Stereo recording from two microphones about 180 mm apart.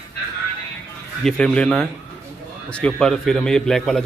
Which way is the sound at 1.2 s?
5° left (ahead or behind).